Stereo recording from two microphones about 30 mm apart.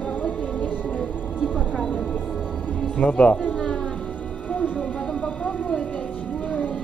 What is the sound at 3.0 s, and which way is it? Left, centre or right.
Speech, left.